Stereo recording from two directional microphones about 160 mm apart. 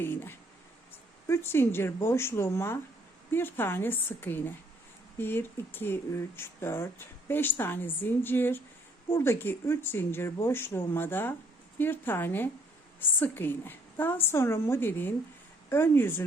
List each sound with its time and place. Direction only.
0.0 s speech: 15° left (ahead or behind)